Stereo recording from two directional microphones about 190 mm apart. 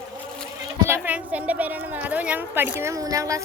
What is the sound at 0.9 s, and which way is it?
A woman's voice, 10° right (ahead or behind).